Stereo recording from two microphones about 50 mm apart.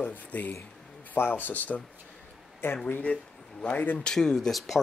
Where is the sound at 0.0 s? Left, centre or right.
Left.